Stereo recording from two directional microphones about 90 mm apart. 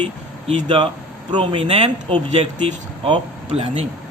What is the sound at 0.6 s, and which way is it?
Speech, 70° right (ahead or behind).